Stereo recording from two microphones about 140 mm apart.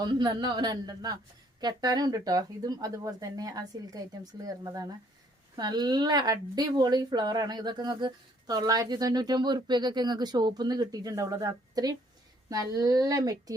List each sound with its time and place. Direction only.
0.0 s speech: 30° right (ahead or behind)